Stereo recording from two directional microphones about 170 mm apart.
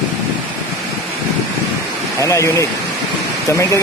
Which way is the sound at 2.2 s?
20° left (ahead or behind).